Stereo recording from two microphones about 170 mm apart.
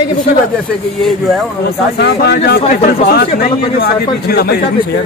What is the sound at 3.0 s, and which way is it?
Speech, 65° left (ahead or behind).